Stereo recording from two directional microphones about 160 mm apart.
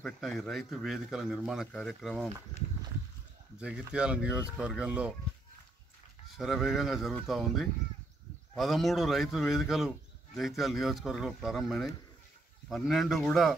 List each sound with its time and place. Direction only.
0.0 s speech: centre (ahead or behind)
3.5 s speech: 5° right (ahead or behind)
6.3 s speech: centre (ahead or behind)